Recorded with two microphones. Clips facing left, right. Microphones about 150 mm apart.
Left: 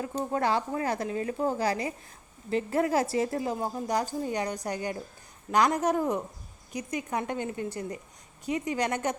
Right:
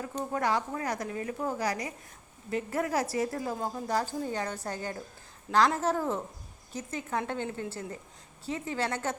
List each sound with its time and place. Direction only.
0.0 s speech: 25° left (ahead or behind)